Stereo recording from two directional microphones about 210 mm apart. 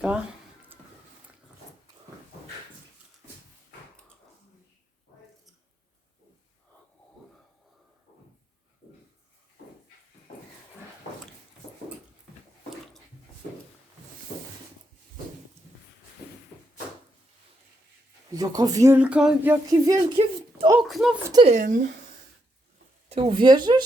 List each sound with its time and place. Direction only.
0.0 s speech: 5° right (ahead or behind)
18.3 s speech: 15° right (ahead or behind)
19.7 s a sound: 20° right (ahead or behind)
20.7 s speech: 5° right (ahead or behind)
21.4 s speech: 35° right (ahead or behind)
23.0 s speech: 25° right (ahead or behind)